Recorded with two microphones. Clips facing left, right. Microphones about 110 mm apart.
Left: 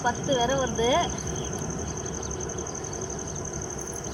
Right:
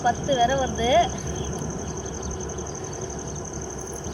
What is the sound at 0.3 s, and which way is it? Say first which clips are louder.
Speech: right 1 dB; 35° left (ahead or behind).